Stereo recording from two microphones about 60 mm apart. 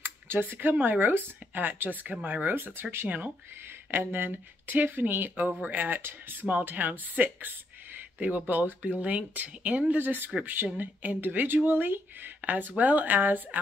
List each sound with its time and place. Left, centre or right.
0.0 s speech: right